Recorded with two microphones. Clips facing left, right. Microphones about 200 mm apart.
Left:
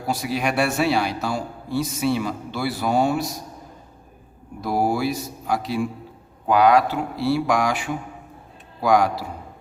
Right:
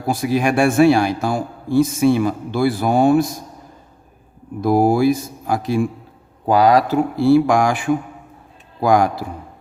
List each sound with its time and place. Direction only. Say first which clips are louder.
0.1 s a man's voice: right 6 dB; 50° right (ahead or behind)
4.6 s a man's voice: right 7 dB; 50° right (ahead or behind)
6.5 s a man's voice: right 3 dB; 35° right (ahead or behind); by 9.1 s 50° right (ahead or behind)